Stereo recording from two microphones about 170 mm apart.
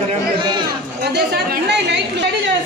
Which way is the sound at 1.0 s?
80° right.